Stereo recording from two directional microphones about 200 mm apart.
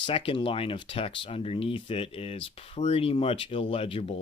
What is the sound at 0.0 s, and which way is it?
Speech, 25° left (ahead or behind).